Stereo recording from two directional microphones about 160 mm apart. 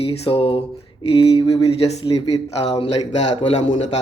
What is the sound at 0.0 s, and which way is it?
Speech, 35° left (ahead or behind).